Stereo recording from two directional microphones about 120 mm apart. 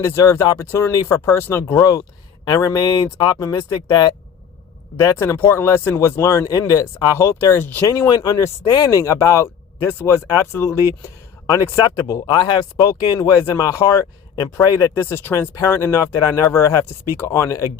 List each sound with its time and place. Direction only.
0.0 s speech: 25° left (ahead or behind)
1.8 s speech: 30° left (ahead or behind)
7.9 s speech: 30° left (ahead or behind)
14.9 s speech: 20° left (ahead or behind)